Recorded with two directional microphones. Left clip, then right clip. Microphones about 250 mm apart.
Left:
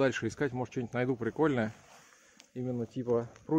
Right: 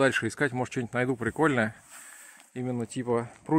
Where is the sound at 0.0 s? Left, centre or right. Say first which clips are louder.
Right 5 dB; right.